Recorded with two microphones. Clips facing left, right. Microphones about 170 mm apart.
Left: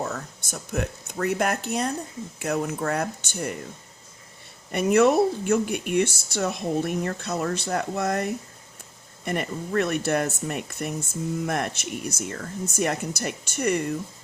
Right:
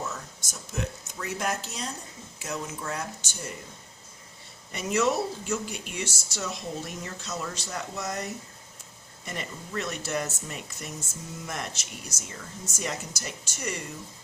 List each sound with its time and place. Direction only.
0.0 s speech: 60° left (ahead or behind)
4.7 s speech: 60° left (ahead or behind)